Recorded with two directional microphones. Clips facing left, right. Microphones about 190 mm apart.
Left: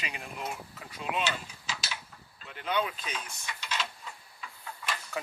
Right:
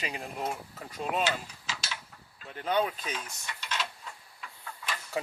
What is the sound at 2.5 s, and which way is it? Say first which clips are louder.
Speech: right 3 dB; 40° right (ahead or behind).